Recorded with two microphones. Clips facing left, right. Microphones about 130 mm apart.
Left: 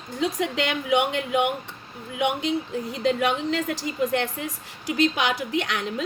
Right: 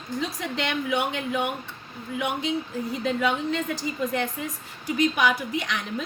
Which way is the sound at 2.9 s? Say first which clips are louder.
Left 2 dB; 90° left.